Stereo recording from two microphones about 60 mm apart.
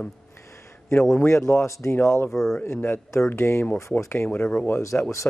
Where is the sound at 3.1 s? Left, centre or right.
Left.